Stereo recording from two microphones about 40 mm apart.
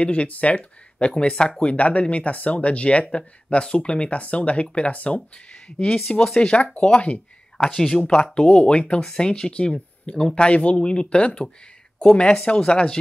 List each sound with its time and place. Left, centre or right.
0.0 s speech: left
7.0 s a sound: left
7.6 s speech: centre
8.2 s speech: left